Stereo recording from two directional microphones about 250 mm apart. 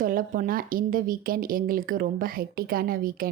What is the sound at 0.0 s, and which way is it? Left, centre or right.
A woman's voice, right.